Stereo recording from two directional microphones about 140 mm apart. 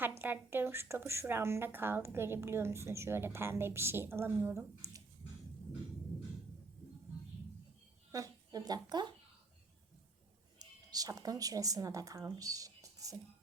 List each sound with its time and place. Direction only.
0.0 s a woman's voice: 15° right (ahead or behind)
8.1 s speech: 25° right (ahead or behind)
10.6 s speech: 25° right (ahead or behind)
12.4 s a sound: 25° right (ahead or behind)